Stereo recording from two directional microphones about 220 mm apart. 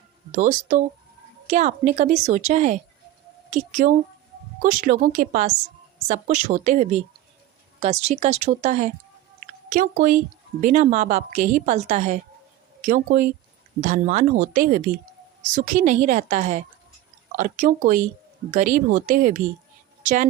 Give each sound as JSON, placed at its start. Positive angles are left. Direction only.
{"t": 0.3, "sound": "a woman's voice", "side_deg": -35}